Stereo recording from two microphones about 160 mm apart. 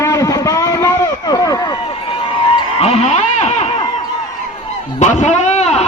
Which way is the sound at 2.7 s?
40° left (ahead or behind).